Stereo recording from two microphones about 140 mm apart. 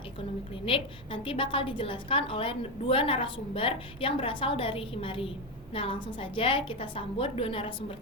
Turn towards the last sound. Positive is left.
turn(degrees=40)  # may be behind; listen again after turning